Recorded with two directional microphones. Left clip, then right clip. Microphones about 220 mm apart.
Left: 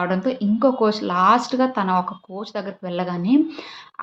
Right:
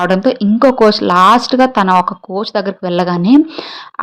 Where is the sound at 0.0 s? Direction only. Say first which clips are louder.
Right 10 dB; 40° right (ahead or behind).